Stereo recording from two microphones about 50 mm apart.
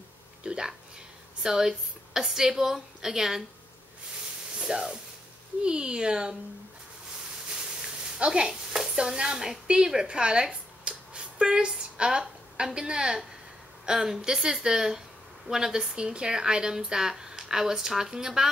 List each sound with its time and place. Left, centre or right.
0.4 s a sound: centre
1.4 s speech: centre
4.6 s speech: centre
8.2 s speech: centre